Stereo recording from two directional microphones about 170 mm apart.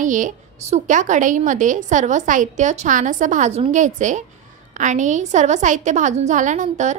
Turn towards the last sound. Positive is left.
turn(degrees=-45)  # may be behind; listen again after turning